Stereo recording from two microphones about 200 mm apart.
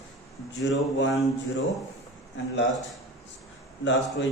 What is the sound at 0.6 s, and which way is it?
Speech, 65° left (ahead or behind).